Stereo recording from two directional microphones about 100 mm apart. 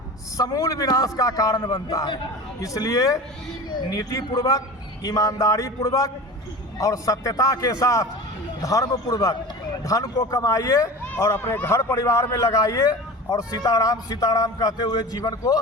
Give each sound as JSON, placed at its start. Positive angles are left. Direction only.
{"t": 0.3, "sound": "a man's voice", "side_deg": 35}